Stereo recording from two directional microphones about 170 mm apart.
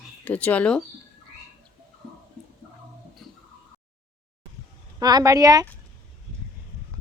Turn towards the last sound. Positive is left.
turn(degrees=-20)  # may be behind; listen again after turning